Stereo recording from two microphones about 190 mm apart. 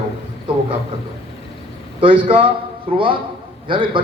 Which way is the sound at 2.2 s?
30° right (ahead or behind).